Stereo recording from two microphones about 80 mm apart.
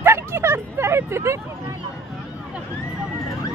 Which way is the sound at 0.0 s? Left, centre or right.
Right.